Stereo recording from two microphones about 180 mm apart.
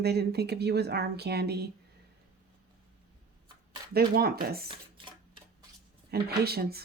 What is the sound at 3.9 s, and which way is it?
Speech, 55° right (ahead or behind).